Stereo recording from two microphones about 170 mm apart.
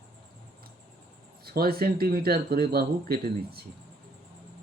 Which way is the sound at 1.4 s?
65° right (ahead or behind).